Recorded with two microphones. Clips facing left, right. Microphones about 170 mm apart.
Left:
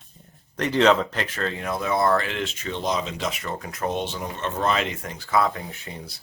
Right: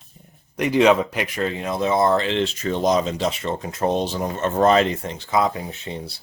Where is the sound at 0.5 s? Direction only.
10° right (ahead or behind).